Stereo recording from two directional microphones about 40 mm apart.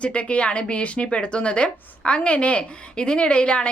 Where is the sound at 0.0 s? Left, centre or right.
Left.